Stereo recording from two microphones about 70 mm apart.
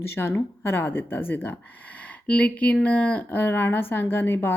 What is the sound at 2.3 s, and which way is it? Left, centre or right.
Speech, centre.